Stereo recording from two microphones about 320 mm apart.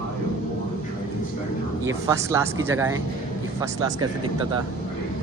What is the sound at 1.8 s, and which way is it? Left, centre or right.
Speech, centre.